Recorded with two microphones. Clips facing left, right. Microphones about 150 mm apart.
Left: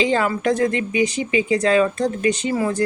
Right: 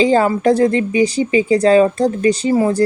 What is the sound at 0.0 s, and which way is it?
A woman's voice, 35° right (ahead or behind).